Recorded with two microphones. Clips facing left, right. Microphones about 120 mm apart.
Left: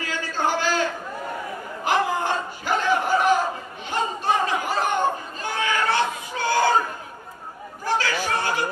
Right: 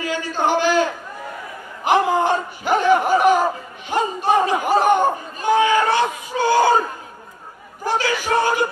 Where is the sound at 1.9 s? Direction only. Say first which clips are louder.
Right 6 dB; 20° right (ahead or behind).